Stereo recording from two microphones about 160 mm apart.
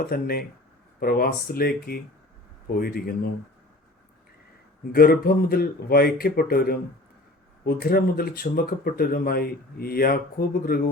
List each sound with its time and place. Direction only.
0.0 s speech: 65° left (ahead or behind)
4.9 s speech: 70° left (ahead or behind)